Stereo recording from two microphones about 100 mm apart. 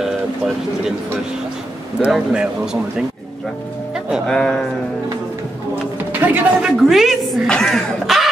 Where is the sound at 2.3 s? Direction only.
10° right (ahead or behind).